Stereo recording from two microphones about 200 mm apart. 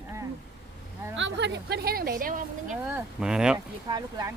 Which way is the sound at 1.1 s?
65° right (ahead or behind).